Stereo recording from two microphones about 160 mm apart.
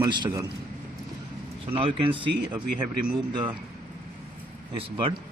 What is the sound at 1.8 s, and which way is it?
Speech, 35° right (ahead or behind).